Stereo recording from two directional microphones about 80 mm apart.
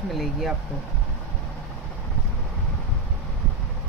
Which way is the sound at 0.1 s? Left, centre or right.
Centre.